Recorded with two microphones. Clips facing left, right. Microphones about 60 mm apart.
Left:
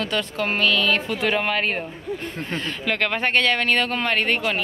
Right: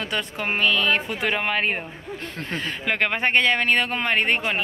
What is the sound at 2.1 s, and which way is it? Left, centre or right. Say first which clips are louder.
Speech: left 6 dB; right.